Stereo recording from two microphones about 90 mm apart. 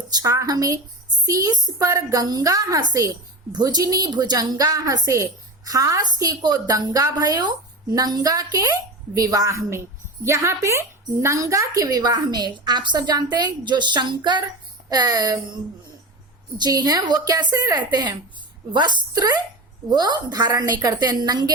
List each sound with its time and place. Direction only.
0.1 s a woman's voice: 45° right (ahead or behind)
14.8 s a woman's voice: 45° right (ahead or behind)
16.6 s a woman's voice: 45° right (ahead or behind)